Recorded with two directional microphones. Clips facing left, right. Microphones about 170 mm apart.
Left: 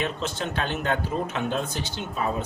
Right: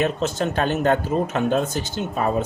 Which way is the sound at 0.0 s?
45° right (ahead or behind).